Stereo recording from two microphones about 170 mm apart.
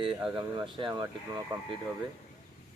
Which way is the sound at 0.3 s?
30° right (ahead or behind).